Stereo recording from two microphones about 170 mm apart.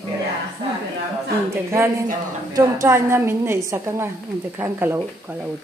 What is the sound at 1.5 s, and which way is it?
Speech, 15° right (ahead or behind).